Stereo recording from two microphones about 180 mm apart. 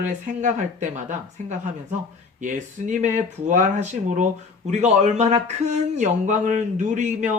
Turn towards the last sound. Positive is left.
turn(degrees=-40)  # may be behind; listen again after turning